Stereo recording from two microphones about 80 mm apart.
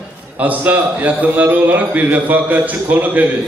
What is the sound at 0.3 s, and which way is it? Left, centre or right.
A man's voice, centre.